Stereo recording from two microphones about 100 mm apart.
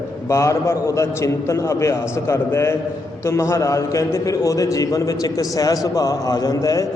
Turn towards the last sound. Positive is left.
turn(degrees=35)  # may be behind; listen again after turning